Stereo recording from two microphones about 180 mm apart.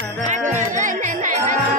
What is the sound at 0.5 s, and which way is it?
Music, 45° right (ahead or behind).